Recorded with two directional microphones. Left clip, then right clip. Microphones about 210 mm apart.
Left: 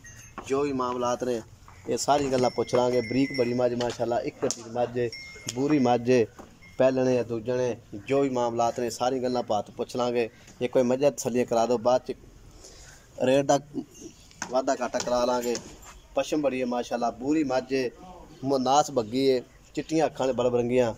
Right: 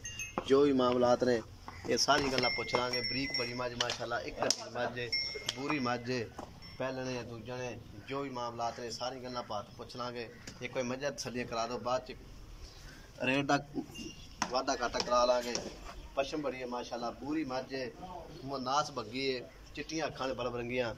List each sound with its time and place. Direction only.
0.5 s speech: 10° left (ahead or behind)
2.5 s speech: 30° left (ahead or behind)
6.8 s speech: 55° left (ahead or behind); by 12.2 s 40° left (ahead or behind)
13.2 s a man's voice: 30° left (ahead or behind)